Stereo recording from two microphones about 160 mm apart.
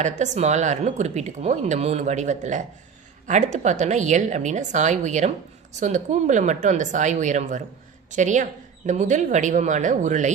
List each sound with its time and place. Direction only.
0.0 s a woman's voice: 45° right (ahead or behind)